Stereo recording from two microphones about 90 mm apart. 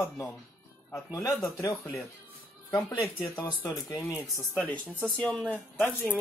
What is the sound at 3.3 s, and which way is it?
Speech, 50° left (ahead or behind).